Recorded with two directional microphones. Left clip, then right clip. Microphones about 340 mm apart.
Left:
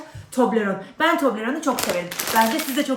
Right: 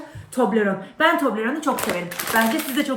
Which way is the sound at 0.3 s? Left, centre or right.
Centre.